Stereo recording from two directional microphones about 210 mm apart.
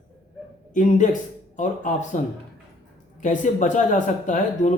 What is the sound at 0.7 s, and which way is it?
A man's voice, 35° left (ahead or behind).